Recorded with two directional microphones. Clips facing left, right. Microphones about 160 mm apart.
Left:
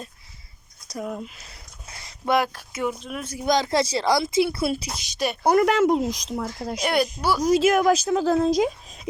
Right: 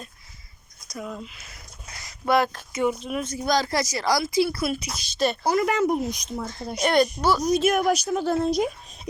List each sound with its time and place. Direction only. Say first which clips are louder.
0.9 s a sound: left 3 dB; 40° left (ahead or behind)
2.3 s speech: right 1 dB; 10° left (ahead or behind)
3.4 s speech: left 4 dB; 20° left (ahead or behind)
5.0 s speech: right 3 dB; 15° left (ahead or behind)
5.4 s speech: left 7 dB; 60° left (ahead or behind); by 6.8 s 90° left
6.8 s speech: right 3 dB; 5° left (ahead or behind)
7.4 s speech: left 6 dB; 90° left